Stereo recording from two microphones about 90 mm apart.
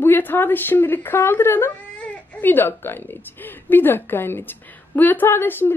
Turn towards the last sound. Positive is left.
turn(degrees=25)  # may be behind; listen again after turning